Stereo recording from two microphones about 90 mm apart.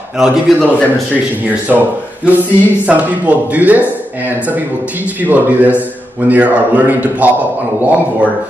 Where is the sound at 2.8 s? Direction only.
15° right (ahead or behind).